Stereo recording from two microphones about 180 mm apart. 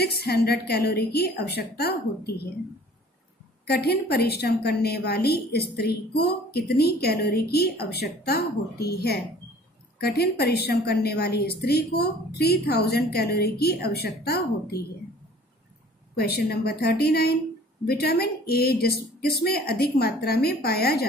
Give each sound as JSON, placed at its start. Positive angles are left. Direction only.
{"t": 0.0, "sound": "a woman's voice", "side_deg": 65}
{"t": 3.6, "sound": "a woman's voice", "side_deg": 60}
{"t": 16.2, "sound": "a woman's voice", "side_deg": 60}